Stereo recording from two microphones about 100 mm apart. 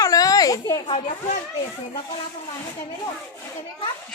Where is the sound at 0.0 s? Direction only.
35° left (ahead or behind).